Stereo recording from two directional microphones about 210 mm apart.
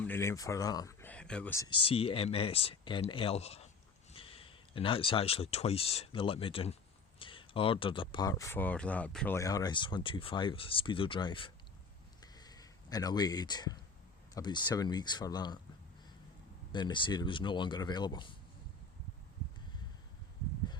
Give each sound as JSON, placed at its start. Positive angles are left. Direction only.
{"t": 0.0, "sound": "speech", "side_deg": 10}
{"t": 12.2, "sound": "a sound", "side_deg": 20}
{"t": 14.3, "sound": "speech", "side_deg": 20}
{"t": 16.7, "sound": "speech", "side_deg": 20}